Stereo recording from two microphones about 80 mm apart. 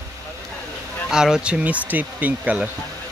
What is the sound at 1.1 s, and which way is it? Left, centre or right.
Speech, centre.